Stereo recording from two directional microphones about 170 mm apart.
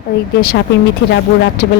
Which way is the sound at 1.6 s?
65° left (ahead or behind).